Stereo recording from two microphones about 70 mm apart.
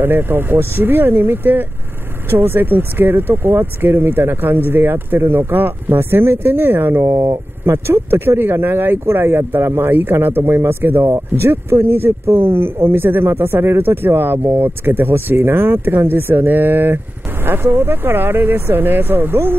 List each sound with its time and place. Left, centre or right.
0.0 s speech: right